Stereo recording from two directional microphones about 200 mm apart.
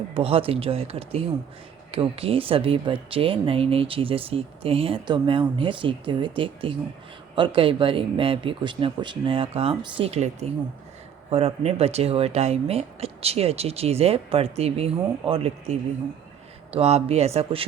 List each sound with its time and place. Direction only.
0.1 s speech: 30° right (ahead or behind)